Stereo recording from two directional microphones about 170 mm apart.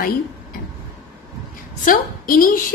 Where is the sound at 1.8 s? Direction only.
55° left (ahead or behind).